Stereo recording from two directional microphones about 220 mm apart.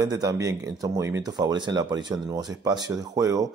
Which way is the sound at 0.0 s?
15° right (ahead or behind).